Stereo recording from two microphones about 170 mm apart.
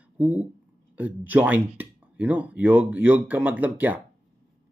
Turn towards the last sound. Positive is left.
turn(degrees=-10)  # may be behind; listen again after turning